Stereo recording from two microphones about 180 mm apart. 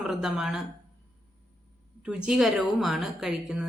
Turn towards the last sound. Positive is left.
turn(degrees=-5)  # may be behind; listen again after turning